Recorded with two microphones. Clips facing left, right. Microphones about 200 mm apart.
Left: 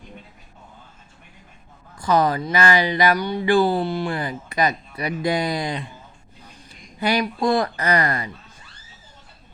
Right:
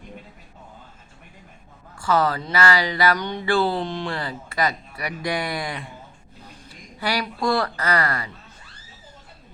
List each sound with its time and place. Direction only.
2.0 s speech: 20° left (ahead or behind)
7.0 s speech: 20° left (ahead or behind)